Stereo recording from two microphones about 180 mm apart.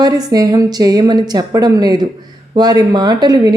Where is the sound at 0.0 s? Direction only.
20° right (ahead or behind).